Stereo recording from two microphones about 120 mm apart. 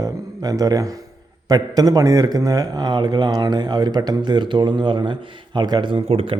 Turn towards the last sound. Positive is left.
turn(degrees=-50)  # may be behind; listen again after turning